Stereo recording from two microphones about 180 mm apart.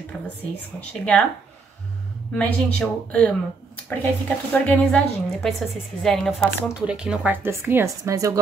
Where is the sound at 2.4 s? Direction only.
5° left (ahead or behind).